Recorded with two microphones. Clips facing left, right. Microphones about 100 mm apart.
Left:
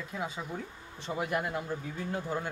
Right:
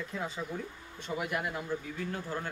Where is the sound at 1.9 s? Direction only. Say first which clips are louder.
Left 2 dB; 15° left (ahead or behind).